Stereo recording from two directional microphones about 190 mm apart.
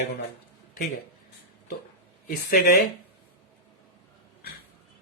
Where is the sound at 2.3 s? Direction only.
50° left (ahead or behind).